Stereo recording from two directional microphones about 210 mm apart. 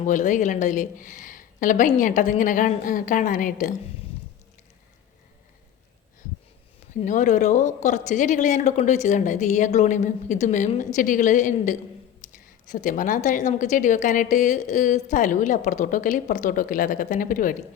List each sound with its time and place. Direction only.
0.0 s speech: 35° left (ahead or behind)
7.0 s speech: 35° left (ahead or behind)